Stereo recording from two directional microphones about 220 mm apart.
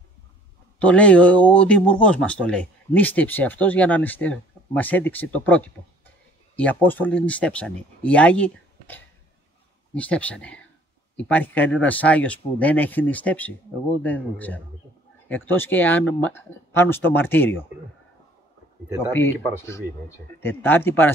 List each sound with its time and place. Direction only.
0.7 s speech: 5° left (ahead or behind)
20.4 s speech: 10° left (ahead or behind)